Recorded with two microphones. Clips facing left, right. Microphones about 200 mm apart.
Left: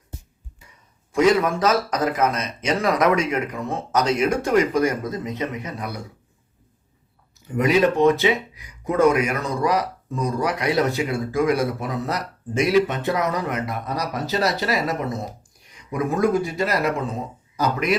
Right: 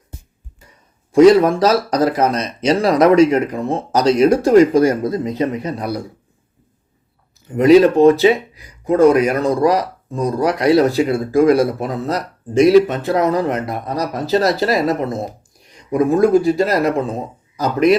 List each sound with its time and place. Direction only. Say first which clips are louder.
1.1 s speech: right 9 dB; 35° right (ahead or behind)
7.5 s speech: right 9 dB; 35° right (ahead or behind)